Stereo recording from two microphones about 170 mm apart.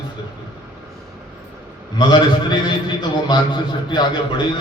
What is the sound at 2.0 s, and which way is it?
A man's voice, 25° left (ahead or behind).